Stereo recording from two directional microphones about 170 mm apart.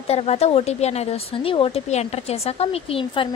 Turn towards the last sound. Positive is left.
turn(degrees=30)  # may be behind; listen again after turning